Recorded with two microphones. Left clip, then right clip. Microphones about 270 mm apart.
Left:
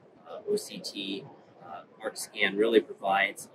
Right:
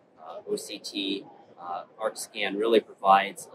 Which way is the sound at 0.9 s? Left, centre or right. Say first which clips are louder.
Right 6 dB; right.